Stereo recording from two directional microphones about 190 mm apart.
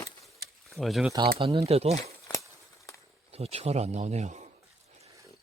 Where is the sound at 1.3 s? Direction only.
30° right (ahead or behind).